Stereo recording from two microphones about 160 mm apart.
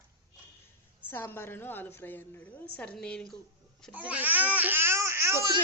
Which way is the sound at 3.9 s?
10° right (ahead or behind).